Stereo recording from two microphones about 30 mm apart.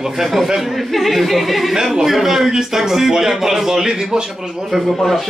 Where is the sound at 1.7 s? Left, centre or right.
Right.